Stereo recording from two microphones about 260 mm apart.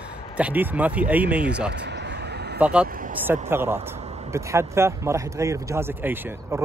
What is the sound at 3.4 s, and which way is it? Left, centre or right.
Speech, centre.